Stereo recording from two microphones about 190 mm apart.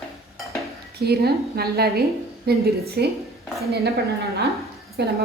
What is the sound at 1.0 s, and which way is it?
A woman's voice, 55° right (ahead or behind).